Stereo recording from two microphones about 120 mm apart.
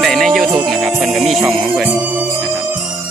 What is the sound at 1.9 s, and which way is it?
Music, 15° right (ahead or behind).